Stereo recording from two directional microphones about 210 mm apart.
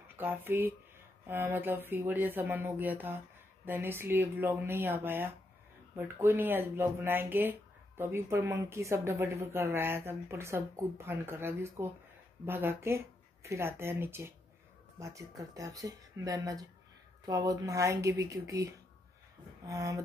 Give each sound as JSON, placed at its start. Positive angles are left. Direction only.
{"t": 0.2, "sound": "speech", "side_deg": -10}